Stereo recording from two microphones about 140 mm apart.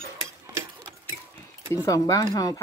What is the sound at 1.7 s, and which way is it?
Speech, 20° left (ahead or behind).